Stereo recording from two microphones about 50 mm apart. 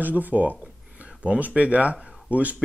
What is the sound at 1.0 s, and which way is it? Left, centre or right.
Speech, right.